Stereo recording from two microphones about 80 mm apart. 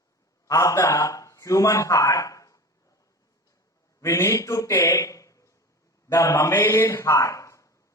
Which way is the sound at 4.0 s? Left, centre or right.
Left.